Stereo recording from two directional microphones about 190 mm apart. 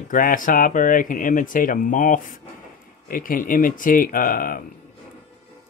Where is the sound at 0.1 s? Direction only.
45° left (ahead or behind).